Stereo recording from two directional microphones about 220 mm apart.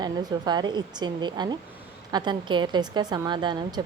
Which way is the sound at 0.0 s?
20° right (ahead or behind).